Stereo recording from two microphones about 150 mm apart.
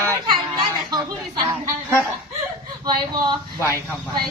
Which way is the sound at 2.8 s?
30° right (ahead or behind).